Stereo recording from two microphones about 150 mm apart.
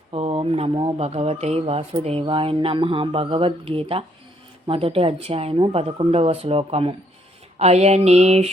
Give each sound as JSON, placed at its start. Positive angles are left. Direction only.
{"t": 0.1, "sound": "speech", "side_deg": -40}
{"t": 7.6, "sound": "mantra", "side_deg": -45}